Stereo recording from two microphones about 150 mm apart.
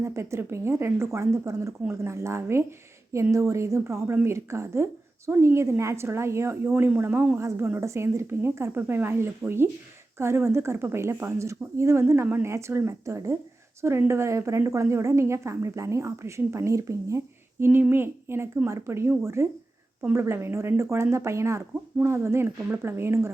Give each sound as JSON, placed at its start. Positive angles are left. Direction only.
{"t": 0.0, "sound": "a woman's voice", "side_deg": -20}